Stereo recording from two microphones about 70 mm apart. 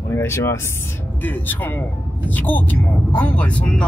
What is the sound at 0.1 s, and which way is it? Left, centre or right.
Speech, left.